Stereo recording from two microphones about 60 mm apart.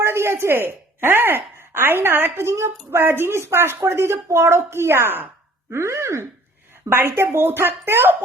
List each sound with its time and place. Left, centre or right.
0.0 s speech: right
6.9 s speech: right